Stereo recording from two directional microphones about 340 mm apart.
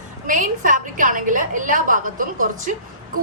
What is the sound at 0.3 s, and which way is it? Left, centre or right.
A woman's voice, right.